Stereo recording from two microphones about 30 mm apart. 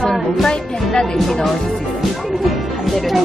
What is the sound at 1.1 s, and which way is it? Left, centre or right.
Speech, centre.